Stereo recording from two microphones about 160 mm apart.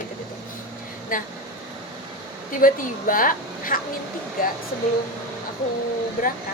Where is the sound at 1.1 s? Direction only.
60° left (ahead or behind).